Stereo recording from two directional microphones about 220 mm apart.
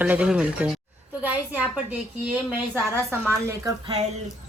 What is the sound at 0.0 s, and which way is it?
A woman's voice, 5° right (ahead or behind).